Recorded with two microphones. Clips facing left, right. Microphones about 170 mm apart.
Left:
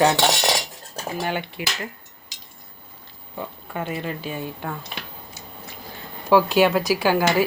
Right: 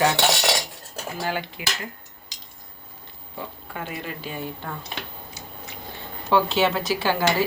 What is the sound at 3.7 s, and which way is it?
Speech, 25° left (ahead or behind).